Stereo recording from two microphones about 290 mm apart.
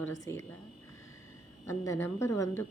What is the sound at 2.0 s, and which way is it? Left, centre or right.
Speech, centre.